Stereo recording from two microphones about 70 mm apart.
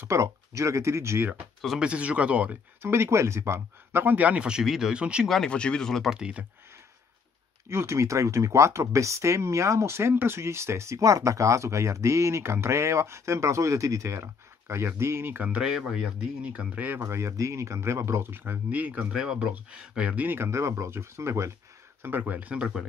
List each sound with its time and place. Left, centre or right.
0.0 s speech: right
1.8 s speech: centre
2.8 s speech: right
4.0 s speech: right
5.5 s speech: centre
6.0 s speech: centre
7.7 s speech: right
15.6 s speech: centre
16.5 s speech: right
17.0 s speech: right; by 20.2 s centre
20.2 s speech: right
22.0 s speech: right